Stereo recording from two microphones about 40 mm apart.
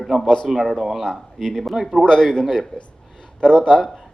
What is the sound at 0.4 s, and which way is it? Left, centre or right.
Speech, centre.